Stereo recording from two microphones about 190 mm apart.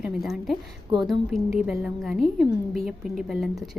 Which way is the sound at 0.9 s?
20° right (ahead or behind).